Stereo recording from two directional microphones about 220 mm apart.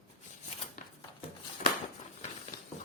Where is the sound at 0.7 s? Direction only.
35° left (ahead or behind).